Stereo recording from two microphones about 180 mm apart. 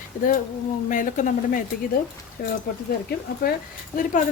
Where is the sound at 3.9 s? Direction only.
50° left (ahead or behind).